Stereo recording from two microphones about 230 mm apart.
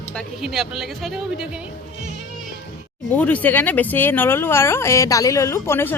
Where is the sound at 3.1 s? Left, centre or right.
Centre.